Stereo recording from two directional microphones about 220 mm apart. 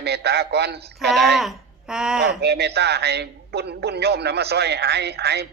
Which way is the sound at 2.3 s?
50° right (ahead or behind).